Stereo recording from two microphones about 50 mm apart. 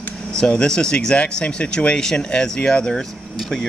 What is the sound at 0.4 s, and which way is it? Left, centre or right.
A man's voice, centre.